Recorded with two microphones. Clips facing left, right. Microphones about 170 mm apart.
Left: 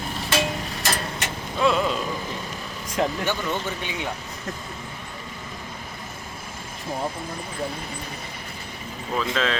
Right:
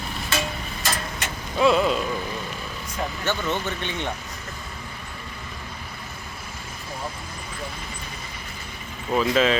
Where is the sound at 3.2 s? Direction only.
10° left (ahead or behind).